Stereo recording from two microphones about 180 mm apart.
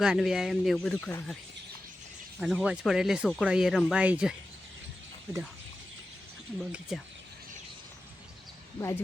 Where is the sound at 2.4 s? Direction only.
Centre (ahead or behind).